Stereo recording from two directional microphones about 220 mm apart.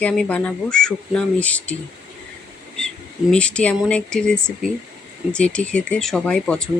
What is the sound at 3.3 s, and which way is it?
Speech, 5° left (ahead or behind).